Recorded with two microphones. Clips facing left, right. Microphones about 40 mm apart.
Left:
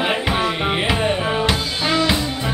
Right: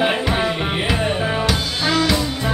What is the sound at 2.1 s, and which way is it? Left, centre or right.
Music, centre.